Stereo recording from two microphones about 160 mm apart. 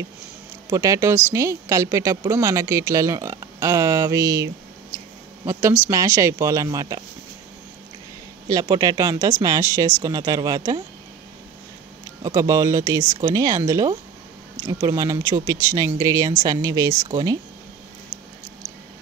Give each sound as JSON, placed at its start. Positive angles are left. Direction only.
{"t": 0.7, "sound": "a woman's voice", "side_deg": -20}
{"t": 8.5, "sound": "a woman's voice", "side_deg": -20}
{"t": 12.2, "sound": "a woman's voice", "side_deg": -20}